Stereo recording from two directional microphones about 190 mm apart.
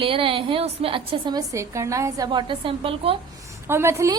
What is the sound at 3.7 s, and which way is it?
Speech, 10° right (ahead or behind).